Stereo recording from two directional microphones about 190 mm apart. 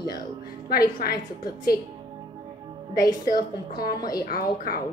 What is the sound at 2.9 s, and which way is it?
Speech, 20° left (ahead or behind).